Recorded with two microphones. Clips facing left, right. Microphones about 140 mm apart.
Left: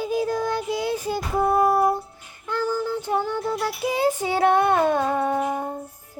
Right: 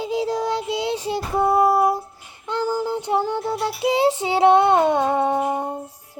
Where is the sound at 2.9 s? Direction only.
20° right (ahead or behind).